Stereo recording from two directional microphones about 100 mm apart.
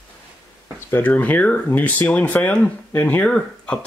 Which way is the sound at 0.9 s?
15° left (ahead or behind).